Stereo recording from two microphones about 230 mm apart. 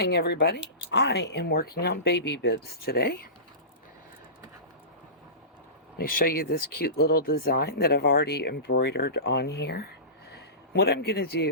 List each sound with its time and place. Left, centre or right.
0.0 s speech: left
6.0 s a man's voice: left